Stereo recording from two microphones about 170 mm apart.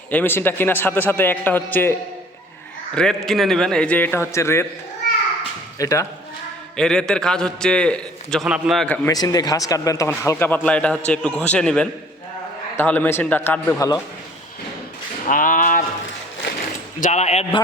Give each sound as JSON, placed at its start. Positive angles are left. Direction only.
{"t": 0.1, "sound": "a man's voice", "side_deg": 10}
{"t": 5.8, "sound": "speech", "side_deg": 20}
{"t": 6.7, "sound": "a man's voice", "side_deg": 5}
{"t": 9.0, "sound": "a man's voice", "side_deg": 20}
{"t": 15.3, "sound": "a sound", "side_deg": 55}
{"t": 17.0, "sound": "speech", "side_deg": 40}